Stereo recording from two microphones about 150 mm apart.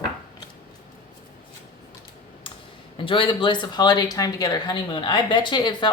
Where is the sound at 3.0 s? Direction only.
35° left (ahead or behind).